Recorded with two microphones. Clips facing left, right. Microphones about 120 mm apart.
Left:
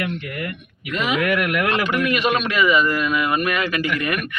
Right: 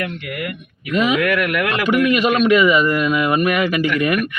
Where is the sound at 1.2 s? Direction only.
25° left (ahead or behind).